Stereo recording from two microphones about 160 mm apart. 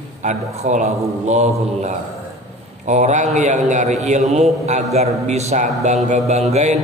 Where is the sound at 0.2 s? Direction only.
50° right (ahead or behind).